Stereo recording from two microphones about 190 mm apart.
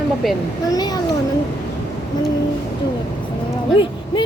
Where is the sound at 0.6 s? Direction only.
20° left (ahead or behind).